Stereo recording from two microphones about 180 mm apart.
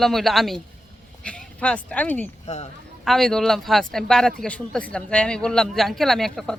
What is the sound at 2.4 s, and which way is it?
Speech, 35° left (ahead or behind).